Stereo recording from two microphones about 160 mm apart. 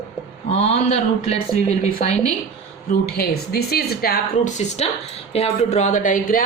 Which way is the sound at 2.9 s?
70° left (ahead or behind).